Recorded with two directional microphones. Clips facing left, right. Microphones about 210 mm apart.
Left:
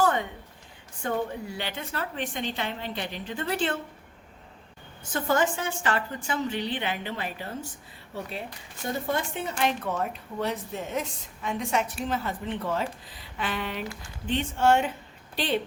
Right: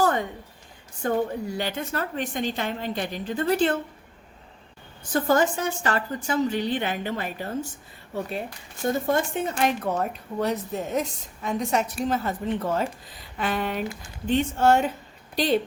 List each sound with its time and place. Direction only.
0.0 s a sound: 40° right (ahead or behind)
1.0 s a woman's voice: 40° right (ahead or behind)
5.1 s a woman's voice: 40° right (ahead or behind)